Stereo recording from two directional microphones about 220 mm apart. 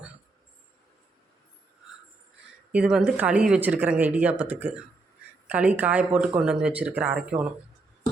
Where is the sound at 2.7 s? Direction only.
5° right (ahead or behind).